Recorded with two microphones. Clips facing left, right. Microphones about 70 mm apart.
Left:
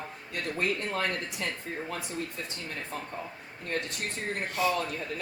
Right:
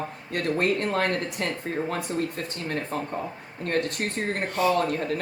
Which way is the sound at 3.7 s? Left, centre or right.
Right.